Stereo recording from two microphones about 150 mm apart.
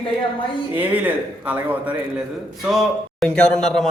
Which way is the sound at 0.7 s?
10° right (ahead or behind).